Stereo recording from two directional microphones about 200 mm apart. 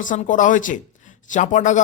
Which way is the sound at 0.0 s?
40° left (ahead or behind).